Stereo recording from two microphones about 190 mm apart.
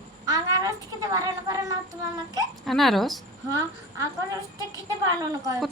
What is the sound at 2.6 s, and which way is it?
Speech, centre (ahead or behind).